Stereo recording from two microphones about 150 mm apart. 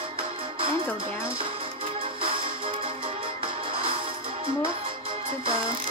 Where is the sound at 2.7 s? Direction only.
35° right (ahead or behind).